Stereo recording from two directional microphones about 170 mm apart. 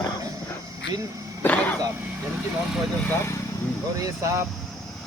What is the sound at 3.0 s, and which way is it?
Speech, 15° left (ahead or behind).